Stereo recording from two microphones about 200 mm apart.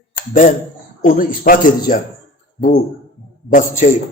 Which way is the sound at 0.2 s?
45° left (ahead or behind).